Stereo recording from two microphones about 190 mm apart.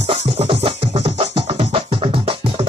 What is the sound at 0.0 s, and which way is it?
Music, 35° right (ahead or behind).